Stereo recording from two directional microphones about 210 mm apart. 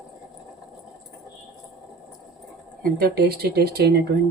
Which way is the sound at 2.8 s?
45° right (ahead or behind).